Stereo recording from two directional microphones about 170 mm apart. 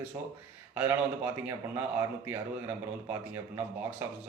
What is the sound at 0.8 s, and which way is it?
A man's voice, 10° right (ahead or behind).